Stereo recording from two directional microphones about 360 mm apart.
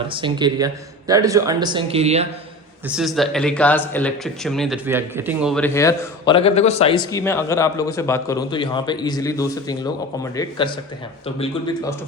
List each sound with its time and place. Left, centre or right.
0.1 s speech: centre
2.8 s speech: centre